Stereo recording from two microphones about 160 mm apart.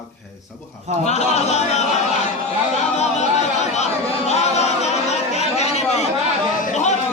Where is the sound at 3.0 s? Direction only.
45° left (ahead or behind).